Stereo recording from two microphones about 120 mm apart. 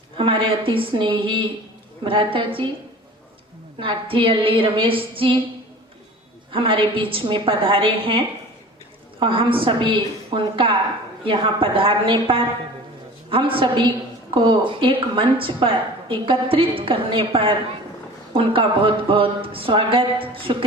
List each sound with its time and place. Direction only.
0.2 s a woman's voice: 45° right (ahead or behind)
3.8 s a woman's voice: 45° right (ahead or behind)
6.5 s a woman's voice: 45° right (ahead or behind)